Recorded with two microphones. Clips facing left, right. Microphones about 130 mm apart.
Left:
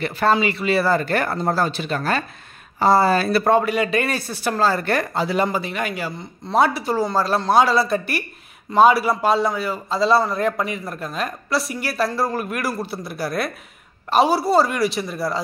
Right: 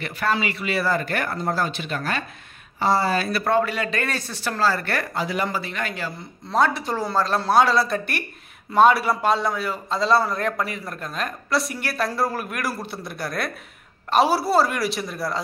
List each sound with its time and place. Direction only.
0.0 s speech: 30° left (ahead or behind)
3.3 s a man's voice: 30° left (ahead or behind)
3.5 s a man's voice: 15° left (ahead or behind)